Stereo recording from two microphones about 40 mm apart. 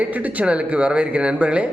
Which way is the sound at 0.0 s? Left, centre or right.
Right.